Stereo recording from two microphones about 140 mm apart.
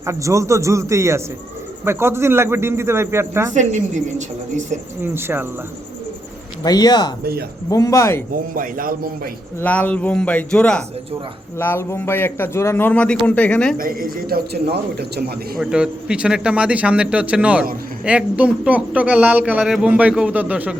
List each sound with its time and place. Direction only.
0.0 s speech: 20° right (ahead or behind)
3.5 s speech: 60° right (ahead or behind)
5.0 s speech: 15° right (ahead or behind)
6.6 s speech: 30° left (ahead or behind)
8.5 s a man's voice: 85° right
9.6 s a man's voice: 10° left (ahead or behind)
13.7 s a man's voice: 90° right
15.5 s speech: 5° right (ahead or behind)